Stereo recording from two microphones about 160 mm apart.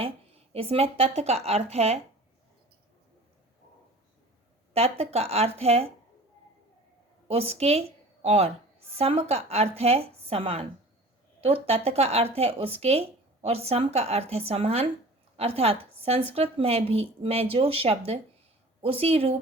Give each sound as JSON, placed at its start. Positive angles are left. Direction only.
{"t": 0.0, "sound": "speech", "side_deg": -35}
{"t": 4.7, "sound": "speech", "side_deg": -40}
{"t": 7.3, "sound": "a woman's voice", "side_deg": -40}